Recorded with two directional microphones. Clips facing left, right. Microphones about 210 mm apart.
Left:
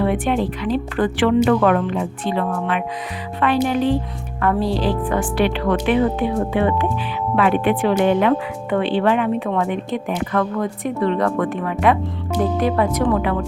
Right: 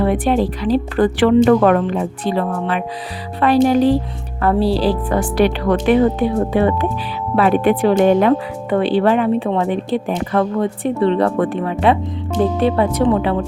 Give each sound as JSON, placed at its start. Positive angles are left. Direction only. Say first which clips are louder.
{"t": 0.0, "sound": "speech", "louder": "right 3 dB", "side_deg": -35}